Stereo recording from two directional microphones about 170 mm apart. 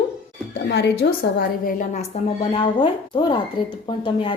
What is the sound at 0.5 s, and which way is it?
A woman's voice, 75° left (ahead or behind).